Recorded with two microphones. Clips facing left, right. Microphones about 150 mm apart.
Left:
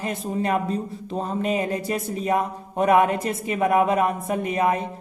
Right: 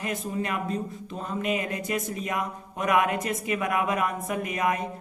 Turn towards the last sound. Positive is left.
turn(degrees=30)  # may be behind; listen again after turning